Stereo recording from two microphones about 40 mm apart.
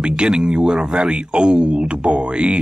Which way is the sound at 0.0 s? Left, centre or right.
Right.